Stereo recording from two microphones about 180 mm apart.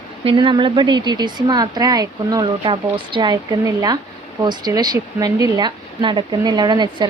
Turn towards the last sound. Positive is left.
turn(degrees=-25)  # may be behind; listen again after turning